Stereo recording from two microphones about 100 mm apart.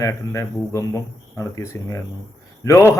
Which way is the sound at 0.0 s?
30° left (ahead or behind).